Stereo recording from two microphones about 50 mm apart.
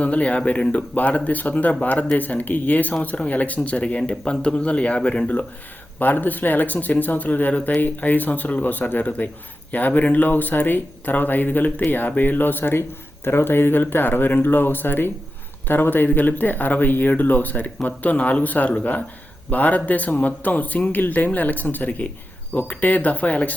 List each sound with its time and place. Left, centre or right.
0.0 s speech: left
0.9 s speech: left
6.0 s speech: left